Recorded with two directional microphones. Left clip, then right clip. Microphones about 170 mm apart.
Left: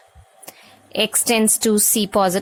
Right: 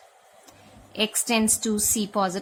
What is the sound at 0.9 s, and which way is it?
A woman's voice, 60° left (ahead or behind).